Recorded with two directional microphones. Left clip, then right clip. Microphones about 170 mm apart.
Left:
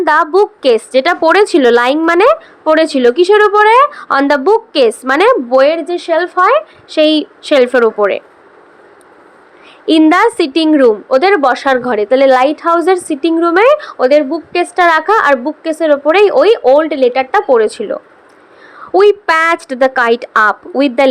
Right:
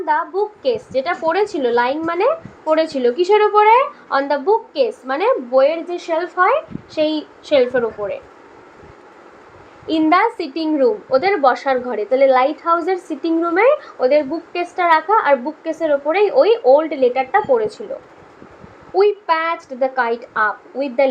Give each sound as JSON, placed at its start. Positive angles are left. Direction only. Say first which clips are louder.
{"t": 0.0, "sound": "a woman's voice", "louder": "left 9 dB", "side_deg": 50}
{"t": 4.1, "sound": "a woman's voice", "louder": "left 4 dB", "side_deg": 50}
{"t": 9.8, "sound": "a woman's voice", "louder": "left 7 dB", "side_deg": 40}
{"t": 18.9, "sound": "a woman's voice", "louder": "left 7 dB", "side_deg": 45}